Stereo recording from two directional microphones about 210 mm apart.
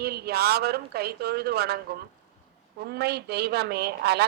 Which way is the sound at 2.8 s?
50° right (ahead or behind).